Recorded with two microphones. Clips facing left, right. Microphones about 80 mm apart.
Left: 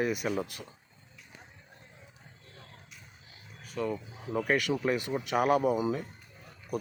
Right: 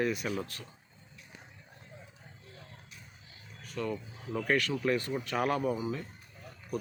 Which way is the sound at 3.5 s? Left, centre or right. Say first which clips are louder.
Left 2 dB; centre.